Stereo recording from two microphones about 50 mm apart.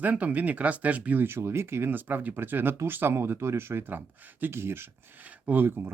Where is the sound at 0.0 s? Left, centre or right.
Right.